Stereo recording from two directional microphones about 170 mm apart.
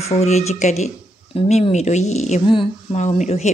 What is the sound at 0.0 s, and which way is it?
Speech, 40° left (ahead or behind).